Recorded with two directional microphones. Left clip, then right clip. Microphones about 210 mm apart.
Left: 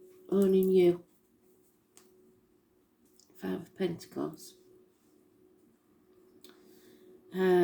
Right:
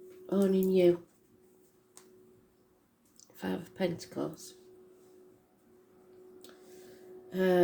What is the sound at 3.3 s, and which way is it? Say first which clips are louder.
Speech: even; 30° right (ahead or behind).